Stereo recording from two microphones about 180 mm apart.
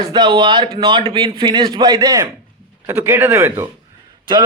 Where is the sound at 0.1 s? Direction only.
25° right (ahead or behind).